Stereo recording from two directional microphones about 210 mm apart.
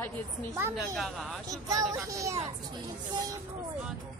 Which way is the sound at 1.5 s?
15° right (ahead or behind).